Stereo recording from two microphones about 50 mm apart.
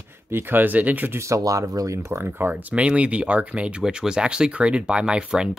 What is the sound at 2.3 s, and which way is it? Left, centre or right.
Speech, right.